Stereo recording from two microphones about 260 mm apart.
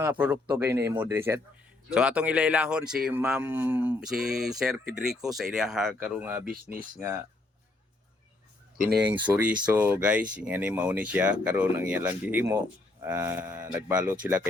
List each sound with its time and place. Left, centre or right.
0.0 s speech: centre
6.4 s speech: right
9.0 s speech: centre